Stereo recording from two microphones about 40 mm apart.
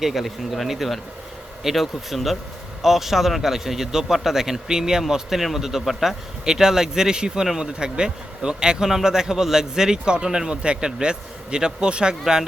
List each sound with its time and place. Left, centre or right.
0.0 s speech: centre; by 12.1 s right
12.2 s speech: centre